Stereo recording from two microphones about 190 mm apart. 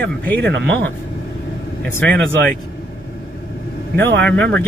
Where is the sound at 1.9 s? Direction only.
10° left (ahead or behind).